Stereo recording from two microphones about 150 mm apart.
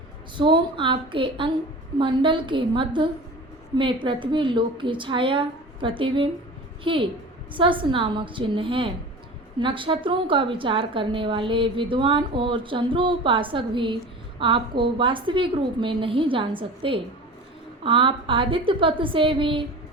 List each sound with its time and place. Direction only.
0.3 s a woman's voice: 35° right (ahead or behind)